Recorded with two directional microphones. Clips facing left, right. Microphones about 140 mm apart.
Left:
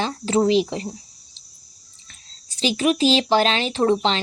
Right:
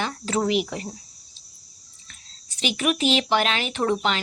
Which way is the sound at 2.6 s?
30° left (ahead or behind).